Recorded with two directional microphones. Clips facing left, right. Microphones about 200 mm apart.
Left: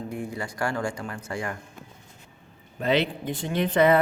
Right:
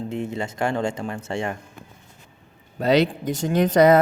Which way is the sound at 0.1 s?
25° right (ahead or behind).